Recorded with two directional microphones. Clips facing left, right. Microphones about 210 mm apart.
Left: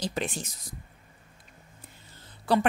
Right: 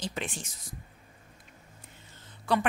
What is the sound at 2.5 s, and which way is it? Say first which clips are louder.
Speech: left 3 dB; 35° left (ahead or behind).